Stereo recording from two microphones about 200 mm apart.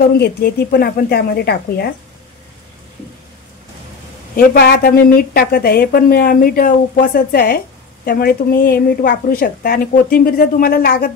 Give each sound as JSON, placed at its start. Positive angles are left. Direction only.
{"t": 0.0, "sound": "a woman's voice", "side_deg": 50}
{"t": 4.4, "sound": "a woman's voice", "side_deg": 50}